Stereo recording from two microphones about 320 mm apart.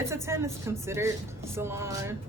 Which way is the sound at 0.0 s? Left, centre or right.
Centre.